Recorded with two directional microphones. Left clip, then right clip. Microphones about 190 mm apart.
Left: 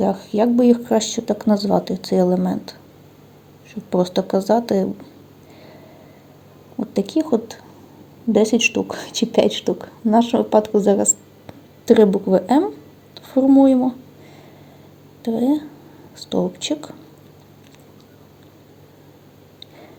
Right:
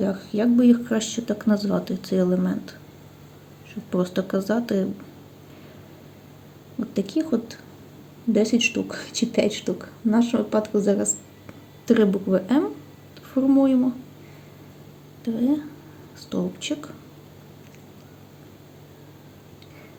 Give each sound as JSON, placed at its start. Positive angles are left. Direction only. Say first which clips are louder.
{"t": 0.0, "sound": "speech", "louder": "left 6 dB", "side_deg": 20}
{"t": 3.8, "sound": "speech", "louder": "left 6 dB", "side_deg": 20}
{"t": 6.7, "sound": "speech", "louder": "left 5 dB", "side_deg": 20}
{"t": 15.2, "sound": "speech", "louder": "left 5 dB", "side_deg": 25}